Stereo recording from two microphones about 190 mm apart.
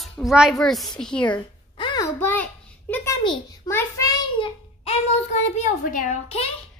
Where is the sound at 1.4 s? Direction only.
25° left (ahead or behind); by 3.1 s 10° left (ahead or behind).